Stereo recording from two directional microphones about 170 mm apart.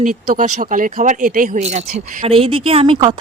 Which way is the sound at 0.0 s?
50° right (ahead or behind).